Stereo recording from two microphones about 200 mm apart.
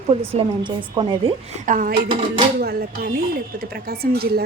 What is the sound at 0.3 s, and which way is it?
Speech, 25° right (ahead or behind).